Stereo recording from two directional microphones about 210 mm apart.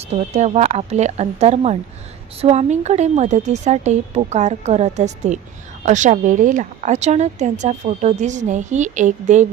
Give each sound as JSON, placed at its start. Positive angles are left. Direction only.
{"t": 0.1, "sound": "speech", "side_deg": -30}